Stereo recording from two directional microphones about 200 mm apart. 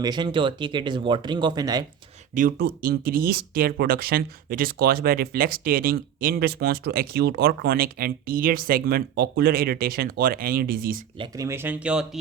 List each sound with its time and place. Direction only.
0.0 s speech: 20° right (ahead or behind)
2.3 s speech: 45° right (ahead or behind)
11.2 s speech: 15° right (ahead or behind)